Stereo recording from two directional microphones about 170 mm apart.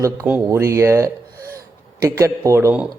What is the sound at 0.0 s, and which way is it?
A man's voice, 15° right (ahead or behind).